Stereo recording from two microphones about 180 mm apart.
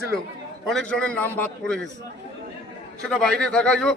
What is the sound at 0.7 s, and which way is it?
A man's voice, 5° left (ahead or behind).